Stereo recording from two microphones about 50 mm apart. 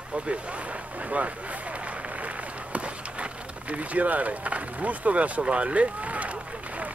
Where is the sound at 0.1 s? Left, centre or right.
Right.